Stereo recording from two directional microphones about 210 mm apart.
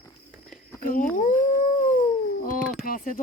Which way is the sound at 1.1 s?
35° left (ahead or behind).